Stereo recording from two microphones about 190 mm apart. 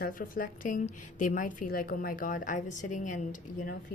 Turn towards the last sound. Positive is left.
turn(degrees=45)  # may be behind; listen again after turning